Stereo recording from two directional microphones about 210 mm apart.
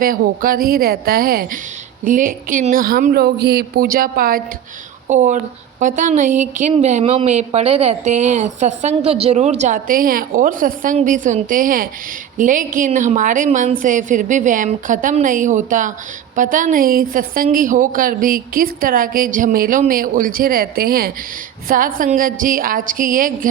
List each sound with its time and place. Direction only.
0.0 s a woman's voice: 45° right (ahead or behind)